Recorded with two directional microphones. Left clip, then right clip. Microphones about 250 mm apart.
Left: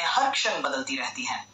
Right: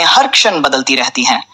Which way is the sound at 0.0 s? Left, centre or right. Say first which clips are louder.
Right 15 dB; right.